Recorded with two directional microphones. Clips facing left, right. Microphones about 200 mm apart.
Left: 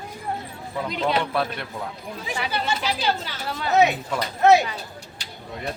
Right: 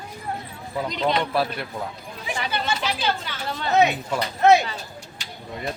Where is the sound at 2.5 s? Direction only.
35° left (ahead or behind).